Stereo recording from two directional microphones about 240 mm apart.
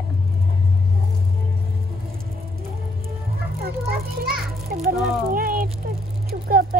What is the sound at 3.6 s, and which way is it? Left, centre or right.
Speech, right.